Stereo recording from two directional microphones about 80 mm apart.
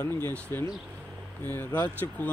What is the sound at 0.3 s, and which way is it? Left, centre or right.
Speech, left.